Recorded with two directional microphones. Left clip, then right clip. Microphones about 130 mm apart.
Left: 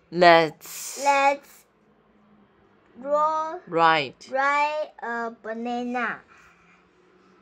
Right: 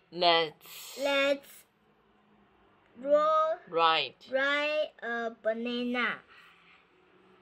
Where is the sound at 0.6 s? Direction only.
25° left (ahead or behind).